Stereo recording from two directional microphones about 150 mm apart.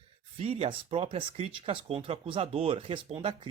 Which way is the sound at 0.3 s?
45° right (ahead or behind).